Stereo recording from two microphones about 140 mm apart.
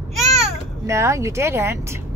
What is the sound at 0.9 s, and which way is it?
Speech, 20° right (ahead or behind).